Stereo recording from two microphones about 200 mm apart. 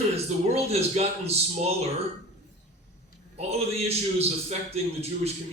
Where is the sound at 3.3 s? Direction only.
30° right (ahead or behind).